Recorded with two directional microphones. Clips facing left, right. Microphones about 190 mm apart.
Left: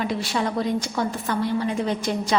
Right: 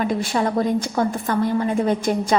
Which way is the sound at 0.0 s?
45° right (ahead or behind).